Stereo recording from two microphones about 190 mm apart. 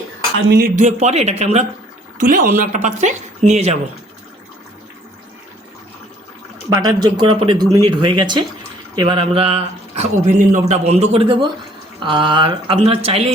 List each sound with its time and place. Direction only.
0.3 s speech: 60° right (ahead or behind); by 3.8 s 35° right (ahead or behind)
6.7 s speech: 20° right (ahead or behind)